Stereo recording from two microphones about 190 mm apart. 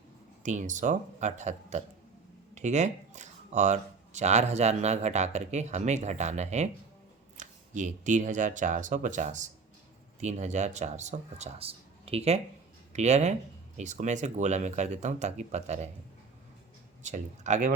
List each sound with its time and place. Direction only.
0.4 s speech: 40° right (ahead or behind)
17.0 s speech: 40° right (ahead or behind)